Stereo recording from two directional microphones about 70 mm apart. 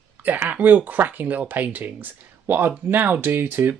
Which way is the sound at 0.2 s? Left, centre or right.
Right.